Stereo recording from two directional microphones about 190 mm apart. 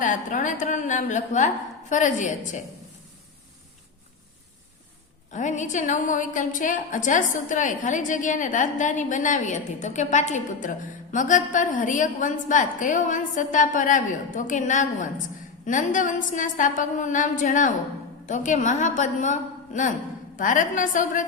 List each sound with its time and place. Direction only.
0.0 s a woman's voice: 45° left (ahead or behind)
5.3 s a woman's voice: 40° left (ahead or behind)